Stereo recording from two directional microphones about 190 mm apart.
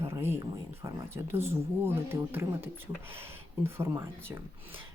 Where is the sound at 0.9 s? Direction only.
15° right (ahead or behind).